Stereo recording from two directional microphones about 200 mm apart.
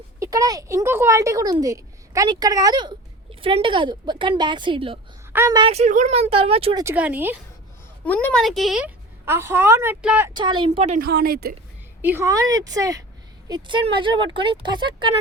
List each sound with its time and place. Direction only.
0.2 s speech: 15° right (ahead or behind)
5.3 s speech: 15° right (ahead or behind)
6.8 s speech: 10° right (ahead or behind)
8.0 s speech: 10° left (ahead or behind); by 10.3 s 5° right (ahead or behind)
10.3 s speech: 25° right (ahead or behind)
10.9 s speech: 50° right (ahead or behind)
12.0 s speech: 15° right (ahead or behind)